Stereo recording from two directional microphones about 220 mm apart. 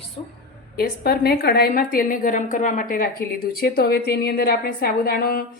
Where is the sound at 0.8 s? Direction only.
45° left (ahead or behind).